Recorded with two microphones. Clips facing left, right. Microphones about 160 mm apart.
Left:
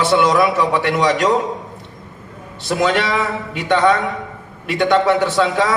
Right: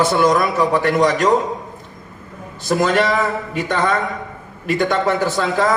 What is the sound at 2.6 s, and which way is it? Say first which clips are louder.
A man's voice: right 1 dB; 45° right (ahead or behind).